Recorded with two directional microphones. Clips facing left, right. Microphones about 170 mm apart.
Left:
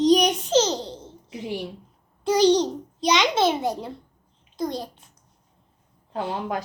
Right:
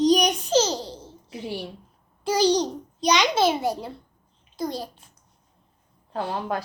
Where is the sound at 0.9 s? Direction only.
5° right (ahead or behind).